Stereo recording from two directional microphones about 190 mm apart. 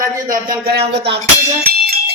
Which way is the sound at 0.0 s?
45° right (ahead or behind).